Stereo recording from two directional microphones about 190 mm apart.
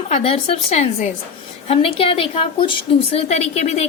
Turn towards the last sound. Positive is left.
turn(degrees=35)  # may be behind; listen again after turning